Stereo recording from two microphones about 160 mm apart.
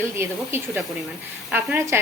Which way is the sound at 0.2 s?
15° right (ahead or behind).